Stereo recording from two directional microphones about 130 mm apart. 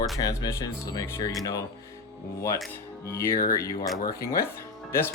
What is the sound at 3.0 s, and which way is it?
Speech, 20° left (ahead or behind).